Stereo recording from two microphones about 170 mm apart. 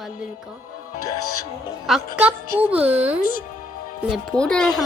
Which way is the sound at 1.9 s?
10° right (ahead or behind).